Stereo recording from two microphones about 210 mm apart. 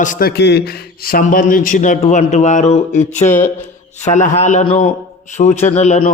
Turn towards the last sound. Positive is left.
turn(degrees=30)  # may be behind; listen again after turning